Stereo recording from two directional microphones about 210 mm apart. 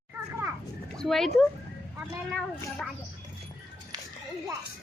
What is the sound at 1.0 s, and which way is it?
Speech, centre (ahead or behind).